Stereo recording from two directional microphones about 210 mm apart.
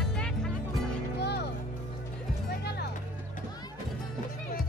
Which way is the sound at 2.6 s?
50° left (ahead or behind).